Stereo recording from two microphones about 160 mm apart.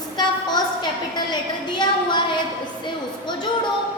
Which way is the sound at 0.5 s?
25° left (ahead or behind).